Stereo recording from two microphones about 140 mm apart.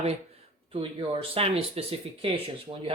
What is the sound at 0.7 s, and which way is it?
Speech, 40° right (ahead or behind).